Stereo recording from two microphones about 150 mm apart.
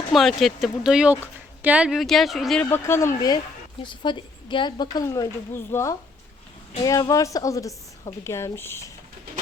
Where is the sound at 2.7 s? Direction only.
15° left (ahead or behind).